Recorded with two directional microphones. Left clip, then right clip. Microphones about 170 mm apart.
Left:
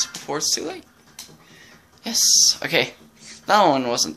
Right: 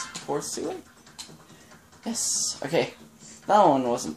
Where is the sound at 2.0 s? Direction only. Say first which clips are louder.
Left 13 dB; 10° right (ahead or behind).